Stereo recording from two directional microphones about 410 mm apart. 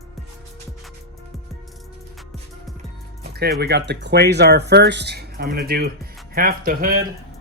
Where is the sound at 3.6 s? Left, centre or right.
Right.